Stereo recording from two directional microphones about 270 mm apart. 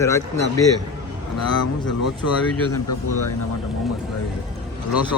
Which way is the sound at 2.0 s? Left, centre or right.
Left.